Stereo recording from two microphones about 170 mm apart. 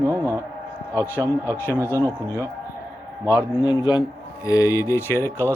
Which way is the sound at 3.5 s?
25° left (ahead or behind).